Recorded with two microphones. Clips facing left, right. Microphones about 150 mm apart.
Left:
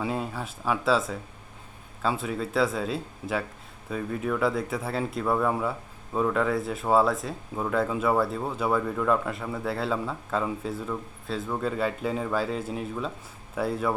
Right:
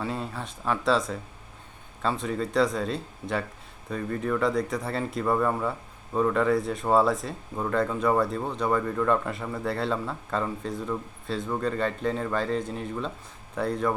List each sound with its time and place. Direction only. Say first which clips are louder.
0.0 s speech: left 2 dB; 5° left (ahead or behind)